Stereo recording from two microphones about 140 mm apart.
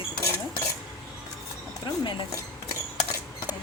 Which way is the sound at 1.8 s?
30° left (ahead or behind).